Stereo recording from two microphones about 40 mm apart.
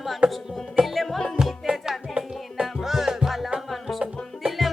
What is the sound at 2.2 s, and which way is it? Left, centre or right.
Music, right.